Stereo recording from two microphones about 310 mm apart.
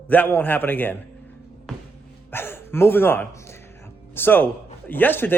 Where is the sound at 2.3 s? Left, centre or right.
Centre.